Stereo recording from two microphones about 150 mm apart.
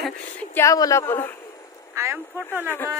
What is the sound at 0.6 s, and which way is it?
Speech, 20° left (ahead or behind).